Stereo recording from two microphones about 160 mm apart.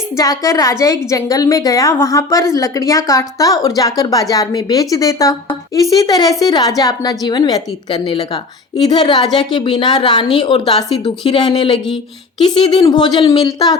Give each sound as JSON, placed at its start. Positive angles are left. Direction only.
{"t": 0.2, "sound": "a woman's voice", "side_deg": 20}